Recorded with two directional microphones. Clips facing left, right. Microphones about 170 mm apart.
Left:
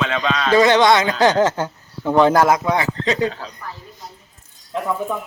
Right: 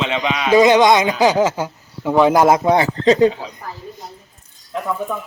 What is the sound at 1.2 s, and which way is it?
Speech, 5° right (ahead or behind).